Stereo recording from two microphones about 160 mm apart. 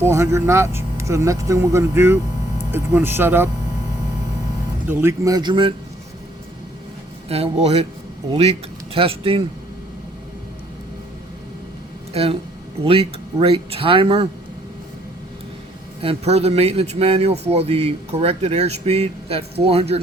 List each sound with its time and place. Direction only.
0.0 s speech: 15° right (ahead or behind)
4.9 s speech: 15° right (ahead or behind)
7.3 s a man's voice: 40° right (ahead or behind)
12.1 s a man's voice: 35° right (ahead or behind)
16.0 s a man's voice: 40° right (ahead or behind)